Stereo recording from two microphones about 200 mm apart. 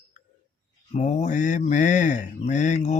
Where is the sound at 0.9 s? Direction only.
35° left (ahead or behind).